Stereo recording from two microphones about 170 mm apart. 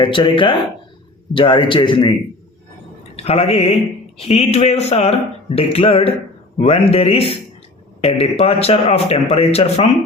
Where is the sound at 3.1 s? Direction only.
40° left (ahead or behind).